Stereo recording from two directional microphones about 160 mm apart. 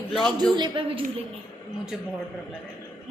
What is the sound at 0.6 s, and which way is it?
Speech, 30° right (ahead or behind).